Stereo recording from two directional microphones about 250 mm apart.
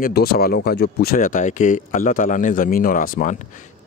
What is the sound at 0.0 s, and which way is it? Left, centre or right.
Speech, left.